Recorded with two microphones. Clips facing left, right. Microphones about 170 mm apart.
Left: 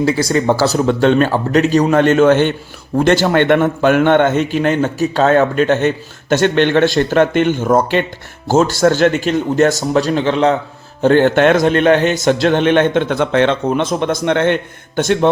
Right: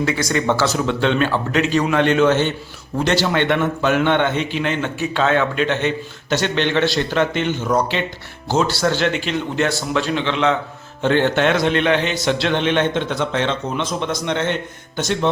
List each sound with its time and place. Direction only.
0.0 s a man's voice: 30° left (ahead or behind); by 15.3 s 55° left (ahead or behind)